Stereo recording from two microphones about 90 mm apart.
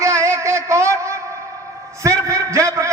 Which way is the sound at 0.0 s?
35° right (ahead or behind).